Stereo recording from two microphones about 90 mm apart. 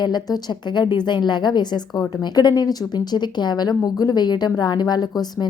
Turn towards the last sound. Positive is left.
turn(degrees=50)  # may be behind; listen again after turning